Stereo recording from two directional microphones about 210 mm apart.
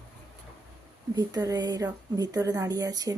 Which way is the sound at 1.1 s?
20° right (ahead or behind).